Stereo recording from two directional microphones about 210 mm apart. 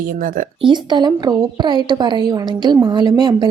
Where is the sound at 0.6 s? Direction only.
20° right (ahead or behind).